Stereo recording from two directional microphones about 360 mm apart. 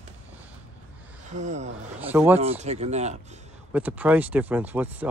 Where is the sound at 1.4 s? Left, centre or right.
Centre.